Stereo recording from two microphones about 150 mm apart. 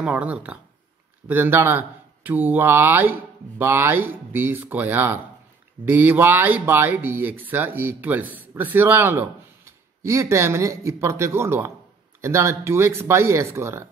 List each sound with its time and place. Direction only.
0.0 s speech: 10° right (ahead or behind)